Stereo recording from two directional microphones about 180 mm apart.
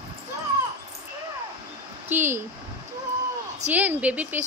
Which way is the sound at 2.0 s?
10° right (ahead or behind).